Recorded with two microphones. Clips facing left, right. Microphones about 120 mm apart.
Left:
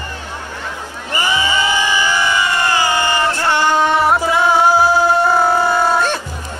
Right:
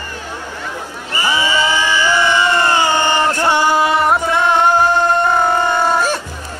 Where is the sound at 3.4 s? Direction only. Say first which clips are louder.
Even; 10° right (ahead or behind); by 6.0 s 5° left (ahead or behind).